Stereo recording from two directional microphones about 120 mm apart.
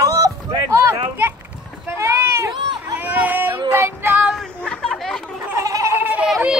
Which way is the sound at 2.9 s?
15° right (ahead or behind).